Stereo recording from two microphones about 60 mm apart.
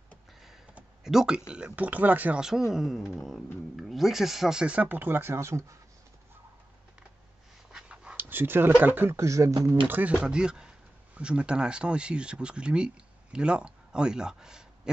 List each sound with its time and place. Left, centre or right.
1.0 s speech: centre
1.5 s speech: right
2.3 s speech: centre
4.8 s speech: right
7.7 s a sound: centre
8.2 s speech: right
9.1 s speech: right
9.7 s speech: right
10.2 s speech: centre